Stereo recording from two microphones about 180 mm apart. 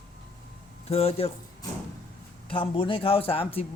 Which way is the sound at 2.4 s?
30° left (ahead or behind).